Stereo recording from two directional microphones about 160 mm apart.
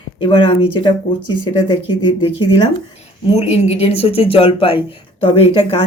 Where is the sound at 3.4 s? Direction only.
40° left (ahead or behind).